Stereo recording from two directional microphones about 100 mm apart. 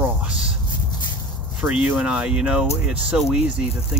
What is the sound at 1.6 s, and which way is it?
Speech, 15° right (ahead or behind).